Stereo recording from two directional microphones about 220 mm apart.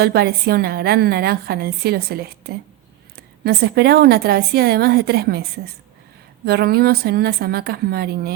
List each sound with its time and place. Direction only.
0.0 s a woman's voice: 45° right (ahead or behind)